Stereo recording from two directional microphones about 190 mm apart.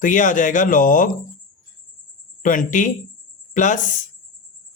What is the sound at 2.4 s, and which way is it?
Speech, 45° left (ahead or behind).